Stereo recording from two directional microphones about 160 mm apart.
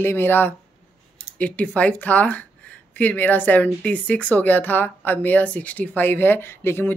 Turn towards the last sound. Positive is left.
turn(degrees=15)  # may be behind; listen again after turning